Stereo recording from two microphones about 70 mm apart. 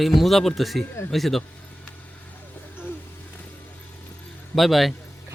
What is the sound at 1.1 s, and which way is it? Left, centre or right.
Speech, centre.